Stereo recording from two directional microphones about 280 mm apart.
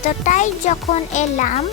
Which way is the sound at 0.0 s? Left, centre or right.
Left.